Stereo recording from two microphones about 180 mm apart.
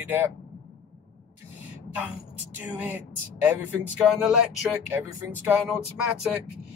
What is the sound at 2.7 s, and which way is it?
Speech, 10° right (ahead or behind).